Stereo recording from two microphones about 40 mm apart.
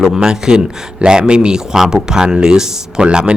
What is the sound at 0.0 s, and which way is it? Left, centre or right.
Speech, centre.